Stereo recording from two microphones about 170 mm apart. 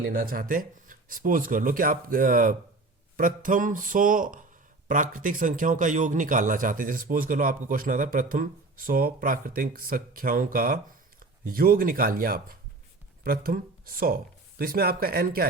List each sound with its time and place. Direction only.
0.1 s a man's voice: 55° right (ahead or behind)